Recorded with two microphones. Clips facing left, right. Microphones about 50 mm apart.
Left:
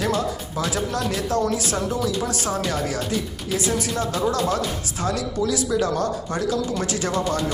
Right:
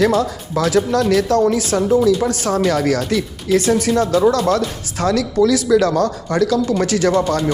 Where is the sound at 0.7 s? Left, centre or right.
Right.